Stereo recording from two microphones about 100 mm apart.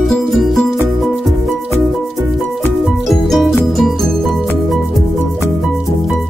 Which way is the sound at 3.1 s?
Centre (ahead or behind).